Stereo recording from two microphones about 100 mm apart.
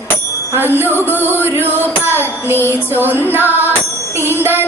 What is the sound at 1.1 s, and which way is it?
Music, 20° left (ahead or behind).